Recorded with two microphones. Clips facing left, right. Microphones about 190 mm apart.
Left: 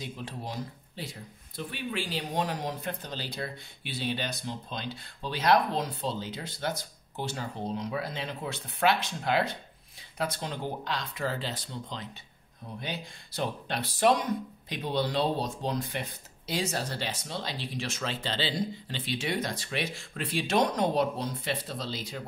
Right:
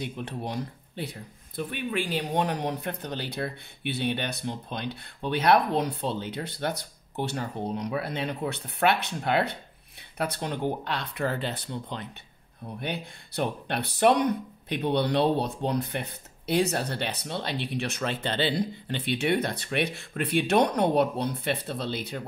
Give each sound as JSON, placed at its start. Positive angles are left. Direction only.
{"t": 0.0, "sound": "speech", "side_deg": -60}